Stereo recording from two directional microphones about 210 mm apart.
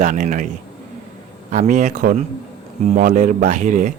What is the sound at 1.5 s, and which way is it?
Speech, 35° right (ahead or behind).